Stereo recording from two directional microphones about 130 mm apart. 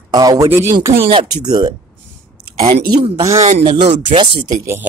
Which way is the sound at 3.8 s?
60° right (ahead or behind).